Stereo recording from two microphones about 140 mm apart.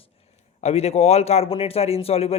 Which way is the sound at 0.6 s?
50° left (ahead or behind).